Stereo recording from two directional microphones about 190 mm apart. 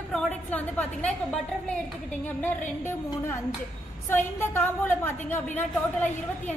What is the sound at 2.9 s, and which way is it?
A woman's voice, 15° left (ahead or behind).